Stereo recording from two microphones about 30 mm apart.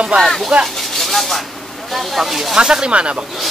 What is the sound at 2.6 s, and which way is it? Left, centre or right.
Speech, right.